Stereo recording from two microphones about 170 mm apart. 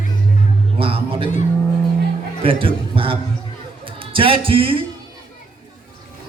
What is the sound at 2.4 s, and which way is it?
A man's voice, 30° right (ahead or behind).